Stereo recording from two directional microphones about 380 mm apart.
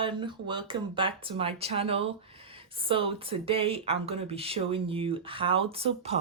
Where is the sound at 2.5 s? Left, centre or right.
Centre.